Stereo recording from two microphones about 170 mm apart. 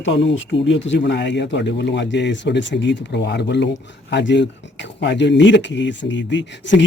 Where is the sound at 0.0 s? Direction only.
90° left.